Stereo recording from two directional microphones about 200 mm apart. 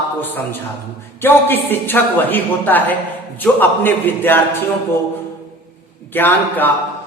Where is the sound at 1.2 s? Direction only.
10° left (ahead or behind).